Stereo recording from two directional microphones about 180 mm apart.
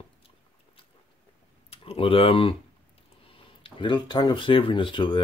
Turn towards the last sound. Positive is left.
turn(degrees=25)  # may be behind; listen again after turning